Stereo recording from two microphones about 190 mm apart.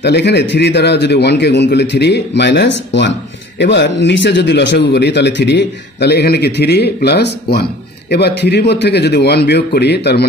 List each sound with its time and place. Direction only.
0.0 s speech: 60° left (ahead or behind)